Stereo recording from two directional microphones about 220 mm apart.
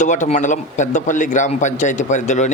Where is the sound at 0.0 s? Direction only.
35° left (ahead or behind).